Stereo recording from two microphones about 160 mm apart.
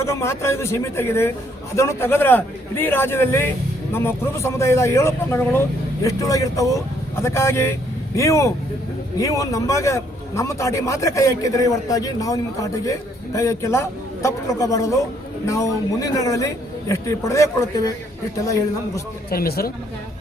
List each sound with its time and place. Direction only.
0.0 s a man's voice: 15° left (ahead or behind)
19.3 s speech: 70° left (ahead or behind)